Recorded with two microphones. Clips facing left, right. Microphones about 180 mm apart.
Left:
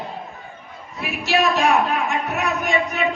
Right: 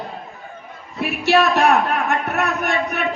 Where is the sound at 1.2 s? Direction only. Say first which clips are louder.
Right 3 dB; 60° right (ahead or behind).